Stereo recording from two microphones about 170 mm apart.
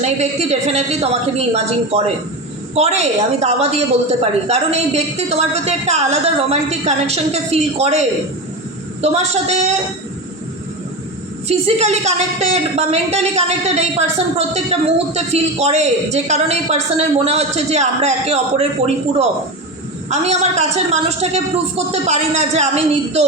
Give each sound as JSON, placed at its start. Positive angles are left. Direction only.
{"t": 0.0, "sound": "speech", "side_deg": -40}
{"t": 11.4, "sound": "speech", "side_deg": -40}
{"t": 20.1, "sound": "speech", "side_deg": -40}